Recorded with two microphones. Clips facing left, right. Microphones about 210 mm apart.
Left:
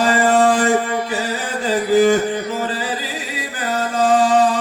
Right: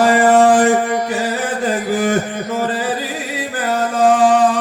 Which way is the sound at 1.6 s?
55° right (ahead or behind).